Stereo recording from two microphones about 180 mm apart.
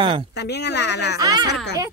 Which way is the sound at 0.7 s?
70° left (ahead or behind).